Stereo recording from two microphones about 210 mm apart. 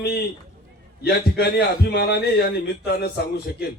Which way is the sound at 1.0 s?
50° left (ahead or behind).